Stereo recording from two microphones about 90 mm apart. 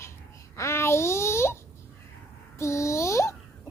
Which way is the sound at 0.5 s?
30° left (ahead or behind).